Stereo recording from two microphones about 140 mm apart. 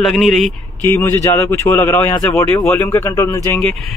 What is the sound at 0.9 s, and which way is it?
Speech, 20° left (ahead or behind).